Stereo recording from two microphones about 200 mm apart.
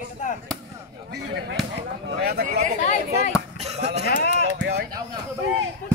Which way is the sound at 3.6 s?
30° right (ahead or behind).